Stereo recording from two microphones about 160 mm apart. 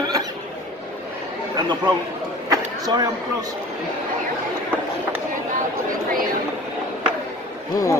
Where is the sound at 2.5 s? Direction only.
25° right (ahead or behind).